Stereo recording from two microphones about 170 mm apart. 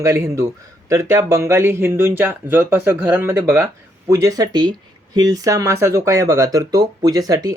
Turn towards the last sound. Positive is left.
turn(degrees=-20)  # may be behind; listen again after turning